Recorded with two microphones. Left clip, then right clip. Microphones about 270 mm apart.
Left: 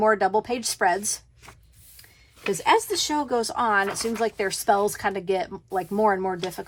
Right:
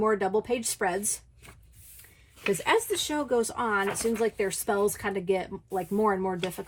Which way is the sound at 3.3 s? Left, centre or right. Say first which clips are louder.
Left 3 dB; left.